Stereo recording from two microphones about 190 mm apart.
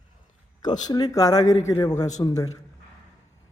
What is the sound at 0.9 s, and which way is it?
Speech, 20° left (ahead or behind).